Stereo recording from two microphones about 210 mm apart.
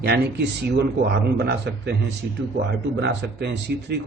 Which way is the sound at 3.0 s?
55° right (ahead or behind).